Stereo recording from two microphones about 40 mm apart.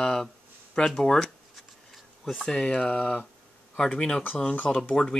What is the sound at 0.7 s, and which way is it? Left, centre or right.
Speech, centre.